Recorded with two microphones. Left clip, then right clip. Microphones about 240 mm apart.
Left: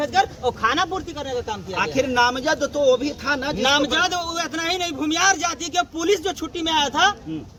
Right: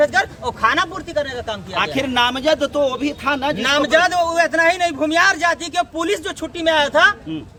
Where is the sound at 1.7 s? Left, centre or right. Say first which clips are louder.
Right 1 dB; right.